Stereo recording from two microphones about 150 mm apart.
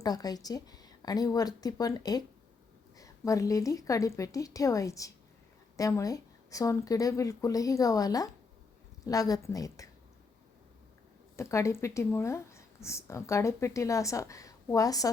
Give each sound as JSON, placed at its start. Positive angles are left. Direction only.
{"t": 0.0, "sound": "speech", "side_deg": 25}
{"t": 11.3, "sound": "speech", "side_deg": 20}